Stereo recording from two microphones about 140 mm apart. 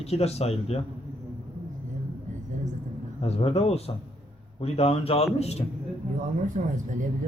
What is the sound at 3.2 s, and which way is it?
A man's voice, 45° left (ahead or behind).